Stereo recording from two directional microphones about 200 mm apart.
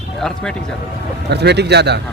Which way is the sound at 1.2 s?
55° right (ahead or behind).